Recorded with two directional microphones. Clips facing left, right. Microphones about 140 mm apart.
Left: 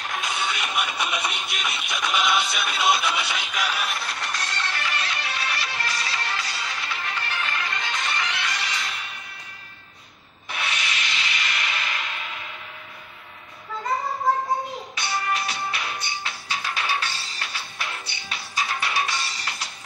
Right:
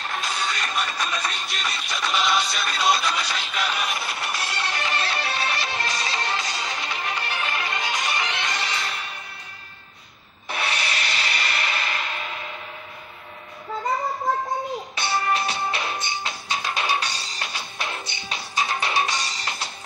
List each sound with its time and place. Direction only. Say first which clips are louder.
0.0 s music: even; 10° left (ahead or behind); by 9.1 s 35° right (ahead or behind)
10.5 s a sound: right 3 dB; 35° right (ahead or behind)
15.0 s music: right 3 dB; 30° right (ahead or behind)